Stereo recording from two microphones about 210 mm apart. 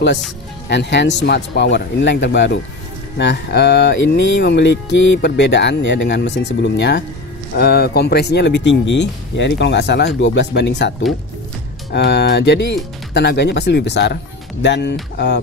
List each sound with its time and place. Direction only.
0.7 s music: 55° left (ahead or behind)
7.5 s speech: 50° left (ahead or behind)
14.6 s music: 55° left (ahead or behind)